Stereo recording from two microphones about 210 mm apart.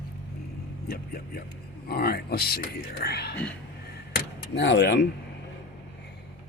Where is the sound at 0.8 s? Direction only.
45° left (ahead or behind).